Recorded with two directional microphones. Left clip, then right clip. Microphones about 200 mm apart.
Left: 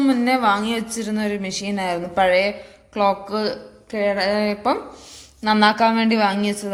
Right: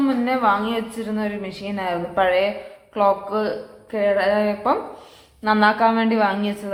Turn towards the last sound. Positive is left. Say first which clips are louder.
# left 1 dB
turn(degrees=40)  # may be behind; listen again after turning